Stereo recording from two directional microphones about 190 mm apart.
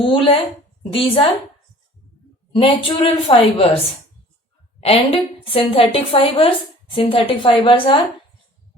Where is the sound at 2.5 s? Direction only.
30° left (ahead or behind).